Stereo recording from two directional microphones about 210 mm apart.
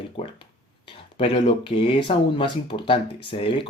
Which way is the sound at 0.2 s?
30° left (ahead or behind).